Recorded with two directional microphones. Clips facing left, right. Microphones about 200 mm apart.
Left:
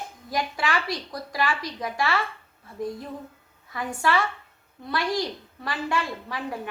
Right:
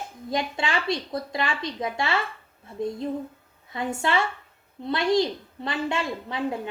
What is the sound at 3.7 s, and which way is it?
A woman's voice, 25° right (ahead or behind).